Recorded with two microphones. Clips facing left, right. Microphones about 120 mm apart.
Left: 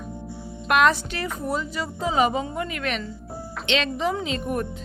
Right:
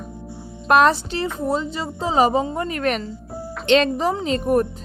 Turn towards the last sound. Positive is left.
turn(degrees=-40)  # may be behind; listen again after turning